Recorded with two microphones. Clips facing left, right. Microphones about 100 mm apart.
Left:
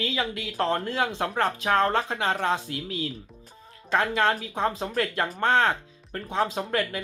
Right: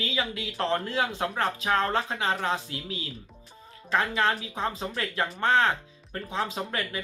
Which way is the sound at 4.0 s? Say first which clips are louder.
Left 2 dB; 45° left (ahead or behind).